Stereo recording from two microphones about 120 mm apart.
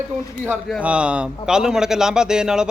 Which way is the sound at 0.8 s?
10° right (ahead or behind).